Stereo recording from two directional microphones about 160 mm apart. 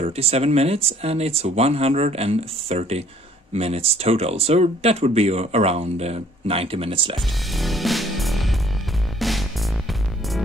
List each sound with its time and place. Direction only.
0.0 s speech: 40° right (ahead or behind)
7.2 s music: centre (ahead or behind)